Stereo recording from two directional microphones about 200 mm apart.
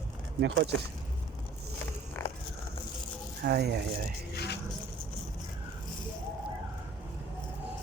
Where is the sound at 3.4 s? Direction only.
55° right (ahead or behind).